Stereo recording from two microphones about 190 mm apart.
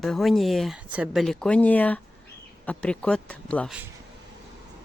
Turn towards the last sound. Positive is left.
turn(degrees=5)  # may be behind; listen again after turning